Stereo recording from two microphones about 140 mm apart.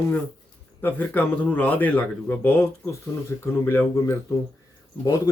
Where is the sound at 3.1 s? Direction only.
25° left (ahead or behind).